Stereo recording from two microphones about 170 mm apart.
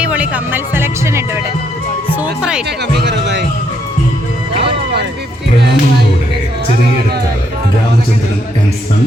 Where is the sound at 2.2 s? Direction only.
5° right (ahead or behind).